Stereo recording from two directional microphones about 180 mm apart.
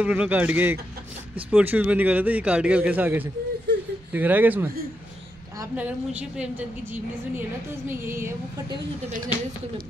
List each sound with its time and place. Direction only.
0.0 s a man's voice: 10° right (ahead or behind)
3.7 s a sound: 70° right (ahead or behind)
4.1 s a man's voice: 10° right (ahead or behind)
5.8 s a man's voice: 10° right (ahead or behind)